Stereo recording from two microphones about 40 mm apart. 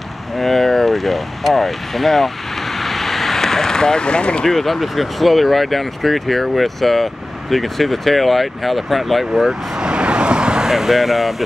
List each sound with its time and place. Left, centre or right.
0.4 s speech: centre
2.8 s vehicle: centre; by 4.5 s left
4.5 s speech: centre
9.8 s vehicle: right
10.7 s speech: centre